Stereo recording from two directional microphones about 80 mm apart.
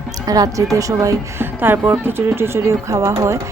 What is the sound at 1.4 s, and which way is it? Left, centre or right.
Speech, right.